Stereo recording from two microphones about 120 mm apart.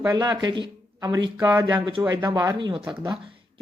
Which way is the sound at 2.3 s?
30° right (ahead or behind).